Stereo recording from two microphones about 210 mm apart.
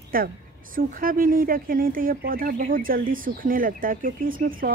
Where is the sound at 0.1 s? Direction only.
45° right (ahead or behind).